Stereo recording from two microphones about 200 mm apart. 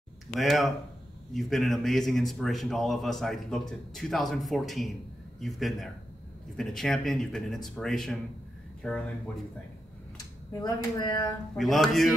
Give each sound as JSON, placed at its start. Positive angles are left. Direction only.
{"t": 0.4, "sound": "a man's voice", "side_deg": 0}
{"t": 10.1, "sound": "speech", "side_deg": 15}
{"t": 11.5, "sound": "a man's voice", "side_deg": 0}